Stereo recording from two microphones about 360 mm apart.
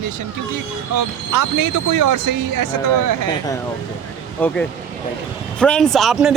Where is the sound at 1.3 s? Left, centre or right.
Right.